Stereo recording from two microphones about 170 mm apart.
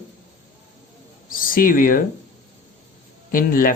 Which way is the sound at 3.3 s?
55° left (ahead or behind).